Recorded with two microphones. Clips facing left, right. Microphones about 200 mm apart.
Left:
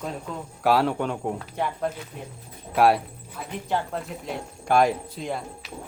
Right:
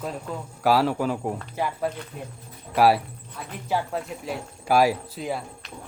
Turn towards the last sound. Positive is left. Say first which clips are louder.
# right 1 dB
turn(degrees=-5)  # may be behind; listen again after turning